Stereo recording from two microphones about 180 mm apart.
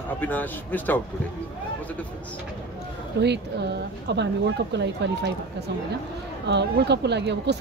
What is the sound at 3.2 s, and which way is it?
Speech, 70° right (ahead or behind).